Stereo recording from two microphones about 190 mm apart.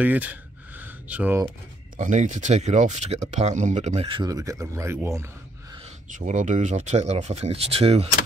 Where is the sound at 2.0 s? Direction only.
40° right (ahead or behind); by 5.3 s 15° right (ahead or behind).